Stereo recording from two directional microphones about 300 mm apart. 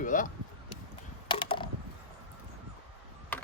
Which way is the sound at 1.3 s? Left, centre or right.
Centre.